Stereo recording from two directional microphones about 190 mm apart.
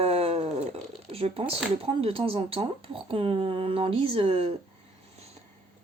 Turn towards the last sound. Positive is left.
turn(degrees=-30)  # may be behind; listen again after turning